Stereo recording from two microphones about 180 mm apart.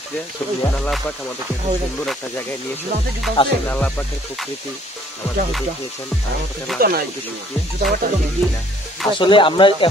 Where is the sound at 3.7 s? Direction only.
10° left (ahead or behind).